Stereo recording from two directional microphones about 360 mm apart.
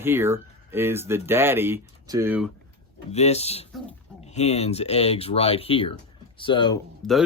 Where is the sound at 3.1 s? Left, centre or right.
Centre.